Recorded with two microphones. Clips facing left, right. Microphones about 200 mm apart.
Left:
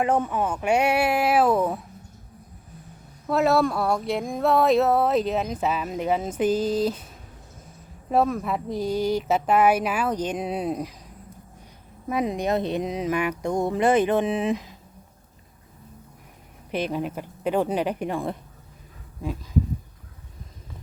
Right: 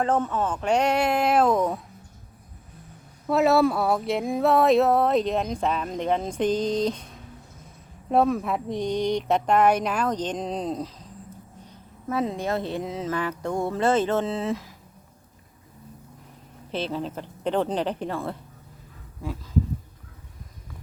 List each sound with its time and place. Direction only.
0.0 s speech: 10° left (ahead or behind)
3.2 s a sound: centre (ahead or behind)
8.1 s speech: centre (ahead or behind); by 14.8 s 20° left (ahead or behind)
16.7 s speech: 15° left (ahead or behind)